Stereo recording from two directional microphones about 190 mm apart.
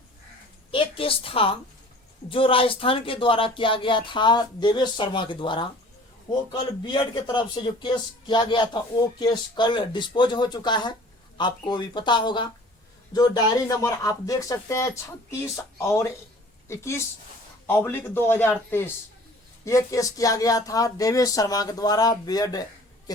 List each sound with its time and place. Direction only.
0.7 s a woman's voice: 30° left (ahead or behind)